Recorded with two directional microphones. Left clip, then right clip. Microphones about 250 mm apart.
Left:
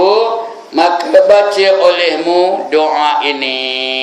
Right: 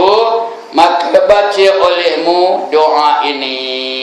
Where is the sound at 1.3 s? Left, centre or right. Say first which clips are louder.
Even; left.